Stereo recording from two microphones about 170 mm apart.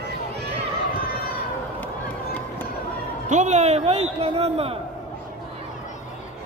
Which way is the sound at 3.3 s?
45° right (ahead or behind).